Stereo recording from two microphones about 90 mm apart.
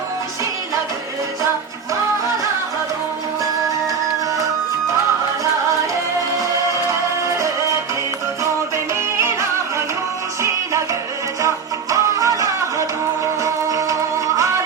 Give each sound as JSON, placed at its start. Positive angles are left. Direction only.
{"t": 9.1, "sound": "music", "side_deg": -30}